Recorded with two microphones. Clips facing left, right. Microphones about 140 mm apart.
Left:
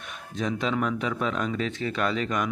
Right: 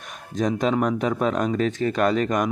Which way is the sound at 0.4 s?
40° right (ahead or behind).